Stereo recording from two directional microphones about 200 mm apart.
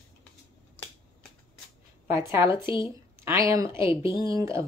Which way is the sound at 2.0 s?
15° right (ahead or behind).